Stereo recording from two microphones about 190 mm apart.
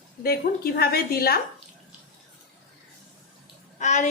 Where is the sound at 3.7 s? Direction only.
40° left (ahead or behind).